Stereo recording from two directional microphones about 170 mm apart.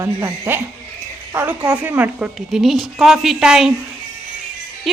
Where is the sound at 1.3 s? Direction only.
10° right (ahead or behind).